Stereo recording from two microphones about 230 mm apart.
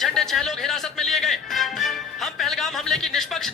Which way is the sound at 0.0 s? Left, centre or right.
Centre.